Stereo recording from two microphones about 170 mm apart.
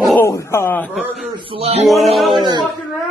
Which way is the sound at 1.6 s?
35° right (ahead or behind).